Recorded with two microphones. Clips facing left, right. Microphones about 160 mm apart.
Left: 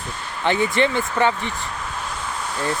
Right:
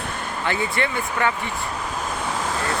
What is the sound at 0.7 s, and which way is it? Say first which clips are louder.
Speech: left 5 dB; 25° left (ahead or behind).